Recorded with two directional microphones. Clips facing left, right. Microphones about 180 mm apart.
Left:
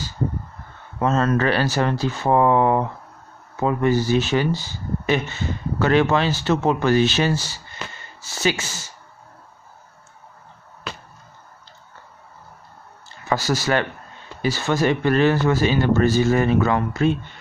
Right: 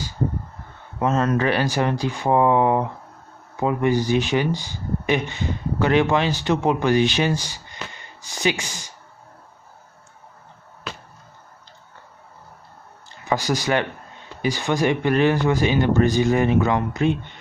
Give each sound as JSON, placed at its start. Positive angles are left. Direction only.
{"t": 0.9, "sound": "speech", "side_deg": -15}
{"t": 13.2, "sound": "speech", "side_deg": -15}